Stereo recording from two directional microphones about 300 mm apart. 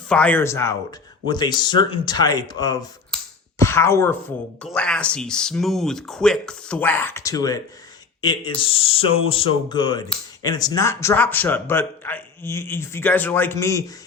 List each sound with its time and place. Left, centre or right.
0.1 s speech: centre